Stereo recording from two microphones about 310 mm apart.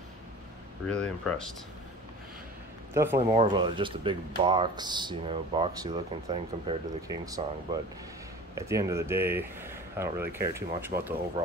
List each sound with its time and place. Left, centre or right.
0.8 s speech: centre
2.9 s speech: centre